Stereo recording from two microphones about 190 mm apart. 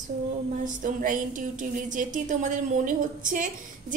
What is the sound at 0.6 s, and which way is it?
Speech, 45° right (ahead or behind).